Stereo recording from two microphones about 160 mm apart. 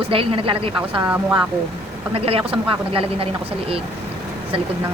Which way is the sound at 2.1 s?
35° right (ahead or behind).